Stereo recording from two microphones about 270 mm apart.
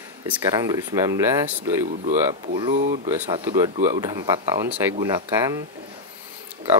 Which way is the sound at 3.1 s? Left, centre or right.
Centre.